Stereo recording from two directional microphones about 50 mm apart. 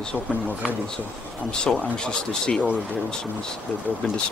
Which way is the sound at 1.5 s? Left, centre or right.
Centre.